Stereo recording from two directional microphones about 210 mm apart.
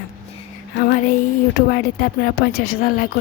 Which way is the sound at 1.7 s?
45° left (ahead or behind).